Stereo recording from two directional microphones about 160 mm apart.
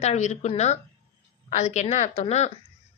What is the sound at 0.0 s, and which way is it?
Speech, 45° left (ahead or behind).